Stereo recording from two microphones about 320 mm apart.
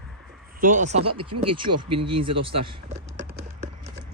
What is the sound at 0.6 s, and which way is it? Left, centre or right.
Speech, right.